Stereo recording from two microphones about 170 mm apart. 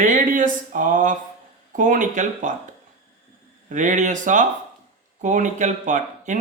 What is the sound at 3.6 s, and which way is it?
Speech, 50° right (ahead or behind).